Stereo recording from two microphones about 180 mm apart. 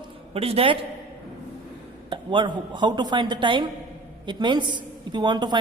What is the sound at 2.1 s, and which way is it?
A woman's voice, 25° right (ahead or behind).